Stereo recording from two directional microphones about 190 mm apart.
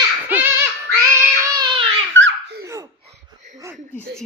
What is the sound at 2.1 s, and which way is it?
Baby laughter, 75° right (ahead or behind).